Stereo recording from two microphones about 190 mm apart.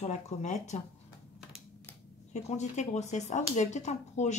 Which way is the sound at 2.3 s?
35° left (ahead or behind).